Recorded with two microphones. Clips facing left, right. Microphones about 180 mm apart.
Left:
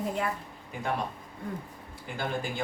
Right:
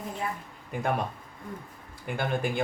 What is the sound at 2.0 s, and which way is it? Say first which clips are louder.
Speech: right 4 dB; 55° right (ahead or behind).